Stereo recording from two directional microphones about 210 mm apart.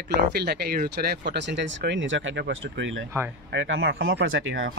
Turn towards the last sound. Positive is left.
turn(degrees=-65)  # may be behind; listen again after turning